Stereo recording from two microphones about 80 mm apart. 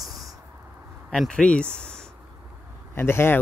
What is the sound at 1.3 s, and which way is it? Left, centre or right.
Speech, centre.